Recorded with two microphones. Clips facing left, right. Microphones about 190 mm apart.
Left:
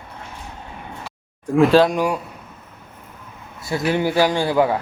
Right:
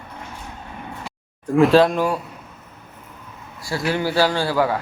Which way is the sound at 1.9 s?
15° left (ahead or behind).